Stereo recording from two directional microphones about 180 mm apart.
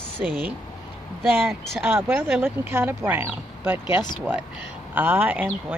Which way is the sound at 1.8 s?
10° right (ahead or behind).